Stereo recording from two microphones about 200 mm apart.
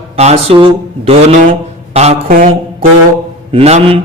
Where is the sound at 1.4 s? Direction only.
40° right (ahead or behind).